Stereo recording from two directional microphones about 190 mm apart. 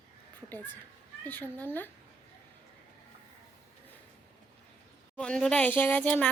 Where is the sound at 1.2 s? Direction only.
10° left (ahead or behind).